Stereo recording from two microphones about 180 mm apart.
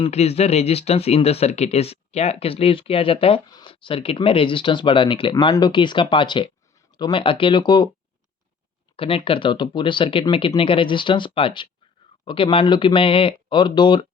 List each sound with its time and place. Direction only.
0.0 s speech: 35° left (ahead or behind)
9.0 s speech: 30° left (ahead or behind)